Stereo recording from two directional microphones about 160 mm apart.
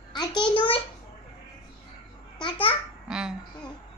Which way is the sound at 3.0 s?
5° right (ahead or behind).